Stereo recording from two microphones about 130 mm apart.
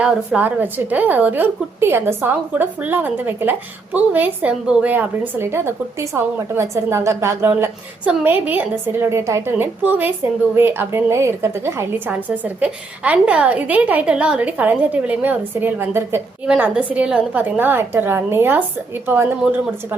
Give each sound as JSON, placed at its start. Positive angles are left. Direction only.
{"t": 0.0, "sound": "a woman's voice", "side_deg": -10}